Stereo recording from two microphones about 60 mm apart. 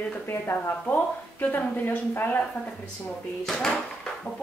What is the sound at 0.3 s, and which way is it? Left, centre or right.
Speech, left.